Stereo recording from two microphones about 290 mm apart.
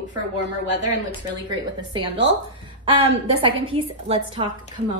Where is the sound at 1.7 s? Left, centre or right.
Centre.